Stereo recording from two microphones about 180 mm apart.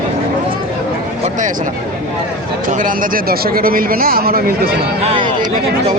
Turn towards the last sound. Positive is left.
turn(degrees=-25)  # may be behind; listen again after turning